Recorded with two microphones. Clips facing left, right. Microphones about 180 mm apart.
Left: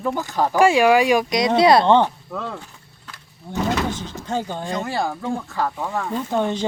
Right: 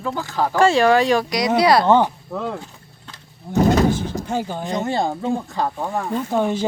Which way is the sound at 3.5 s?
40° right (ahead or behind).